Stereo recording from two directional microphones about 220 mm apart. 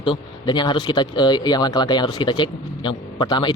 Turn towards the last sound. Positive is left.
turn(degrees=20)  # may be behind; listen again after turning